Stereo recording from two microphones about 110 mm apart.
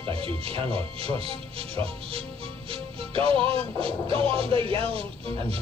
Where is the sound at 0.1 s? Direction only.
60° right (ahead or behind).